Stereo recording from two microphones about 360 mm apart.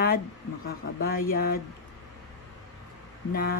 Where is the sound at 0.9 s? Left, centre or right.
Left.